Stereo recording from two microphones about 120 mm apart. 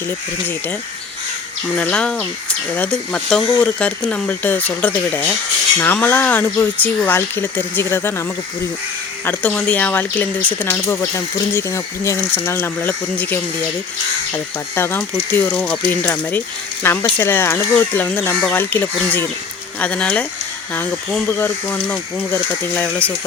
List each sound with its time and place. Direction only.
1.7 s speech: 10° left (ahead or behind)
9.2 s speech: 15° left (ahead or behind)
21.2 s speech: 15° left (ahead or behind)